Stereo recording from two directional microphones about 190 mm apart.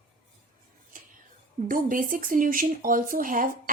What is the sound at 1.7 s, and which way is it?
Speech, 45° right (ahead or behind).